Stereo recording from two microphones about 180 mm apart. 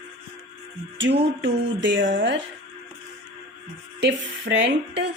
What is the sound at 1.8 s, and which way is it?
Speech, 90° right.